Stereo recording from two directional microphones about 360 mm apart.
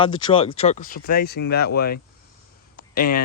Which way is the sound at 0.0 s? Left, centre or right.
Centre.